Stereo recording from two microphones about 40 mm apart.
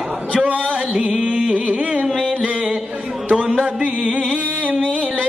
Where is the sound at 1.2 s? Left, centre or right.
Right.